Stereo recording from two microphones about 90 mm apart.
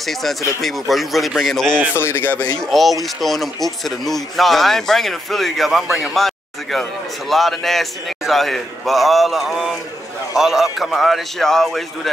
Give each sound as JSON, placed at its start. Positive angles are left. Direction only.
{"t": 0.0, "sound": "speech", "side_deg": 0}
{"t": 2.0, "sound": "speech", "side_deg": 25}
{"t": 2.6, "sound": "speech", "side_deg": 0}